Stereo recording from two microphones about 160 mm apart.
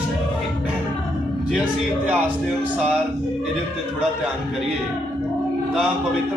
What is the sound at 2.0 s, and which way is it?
Speech, 10° right (ahead or behind).